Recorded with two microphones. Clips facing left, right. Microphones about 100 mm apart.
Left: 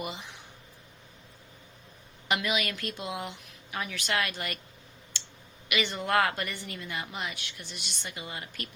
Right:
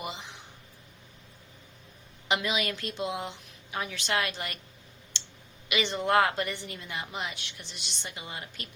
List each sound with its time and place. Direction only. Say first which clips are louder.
0.0 s speech: left 1 dB; 20° right (ahead or behind)
2.2 s a woman's voice: even; 20° right (ahead or behind)
5.1 s clicking: even; 20° right (ahead or behind)
5.6 s a woman's voice: right 2 dB; 20° right (ahead or behind)